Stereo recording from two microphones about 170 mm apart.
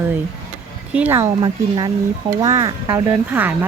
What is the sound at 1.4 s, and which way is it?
A woman's voice, 25° right (ahead or behind).